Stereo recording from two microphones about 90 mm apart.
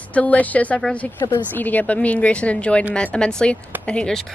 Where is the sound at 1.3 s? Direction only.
20° left (ahead or behind).